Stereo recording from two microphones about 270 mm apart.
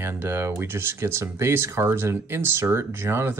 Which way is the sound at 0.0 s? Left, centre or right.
Centre.